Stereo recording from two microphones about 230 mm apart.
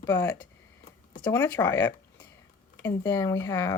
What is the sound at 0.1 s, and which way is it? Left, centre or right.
Speech, centre.